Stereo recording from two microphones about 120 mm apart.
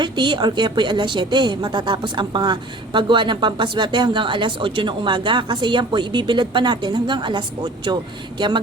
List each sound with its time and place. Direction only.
0.0 s a woman's voice: 40° right (ahead or behind)